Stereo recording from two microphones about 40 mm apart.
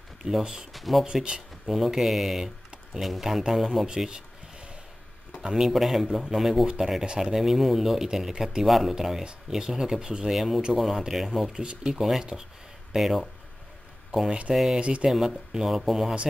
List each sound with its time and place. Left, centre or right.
0.4 s speech: centre
0.7 s speech: centre
1.0 s speech: right
1.7 s speech: centre
3.8 s a sound: centre
5.4 s speech: centre
5.7 s speech: centre
10.2 s speech: centre
11.6 s speech: right
11.9 s speech: centre
14.5 s speech: centre
14.8 s speech: right
15.0 s speech: centre